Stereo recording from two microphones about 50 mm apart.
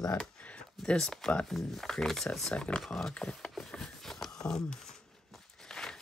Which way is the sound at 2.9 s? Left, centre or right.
Centre.